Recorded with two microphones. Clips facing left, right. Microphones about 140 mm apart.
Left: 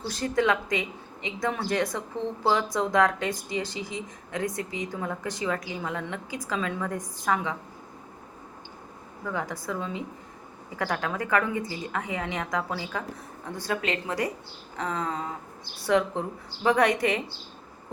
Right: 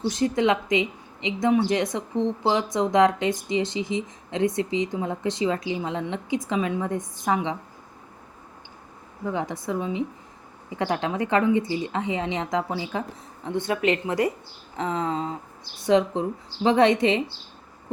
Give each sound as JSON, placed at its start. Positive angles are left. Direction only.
{"t": 0.1, "sound": "a woman's voice", "side_deg": -20}
{"t": 9.2, "sound": "a woman's voice", "side_deg": -20}